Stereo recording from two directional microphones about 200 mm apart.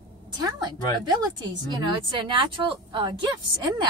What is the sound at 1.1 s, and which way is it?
Speech, 20° right (ahead or behind).